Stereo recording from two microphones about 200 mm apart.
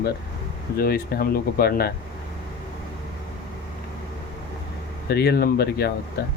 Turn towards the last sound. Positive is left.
turn(degrees=50)  # may be behind; listen again after turning